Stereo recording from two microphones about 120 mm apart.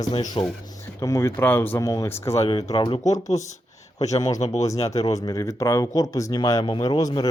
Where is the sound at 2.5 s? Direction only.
35° left (ahead or behind).